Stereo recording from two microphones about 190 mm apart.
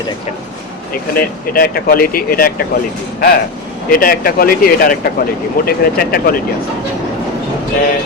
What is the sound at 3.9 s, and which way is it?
A man's voice, 50° left (ahead or behind).